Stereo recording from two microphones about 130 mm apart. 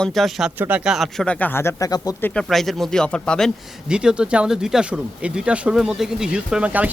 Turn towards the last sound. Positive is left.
turn(degrees=-10)  # may be behind; listen again after turning